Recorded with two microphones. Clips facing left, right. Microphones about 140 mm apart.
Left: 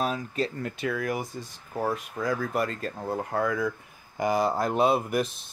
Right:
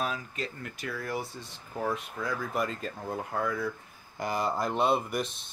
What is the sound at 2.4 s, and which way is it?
Speech, centre (ahead or behind).